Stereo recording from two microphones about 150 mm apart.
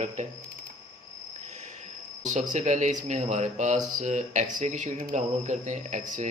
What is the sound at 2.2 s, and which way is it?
Speech, 55° right (ahead or behind).